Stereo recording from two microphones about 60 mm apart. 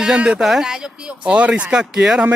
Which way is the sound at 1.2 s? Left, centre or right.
Centre.